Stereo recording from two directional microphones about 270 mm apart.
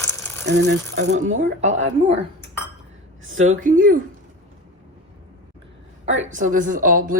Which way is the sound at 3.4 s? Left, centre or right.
Right.